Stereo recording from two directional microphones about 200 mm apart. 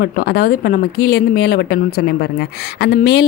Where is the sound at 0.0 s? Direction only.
50° left (ahead or behind).